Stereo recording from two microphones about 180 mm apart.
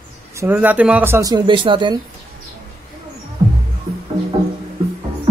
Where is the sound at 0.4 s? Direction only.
10° right (ahead or behind); by 2.0 s 25° right (ahead or behind).